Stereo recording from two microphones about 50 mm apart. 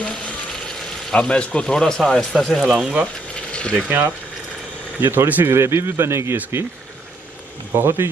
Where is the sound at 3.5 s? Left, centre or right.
Left.